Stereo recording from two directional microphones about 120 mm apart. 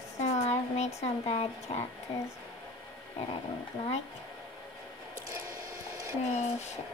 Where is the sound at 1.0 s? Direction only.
55° left (ahead or behind).